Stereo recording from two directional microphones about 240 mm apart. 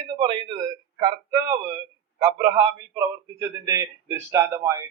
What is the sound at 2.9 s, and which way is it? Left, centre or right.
A man's voice, centre.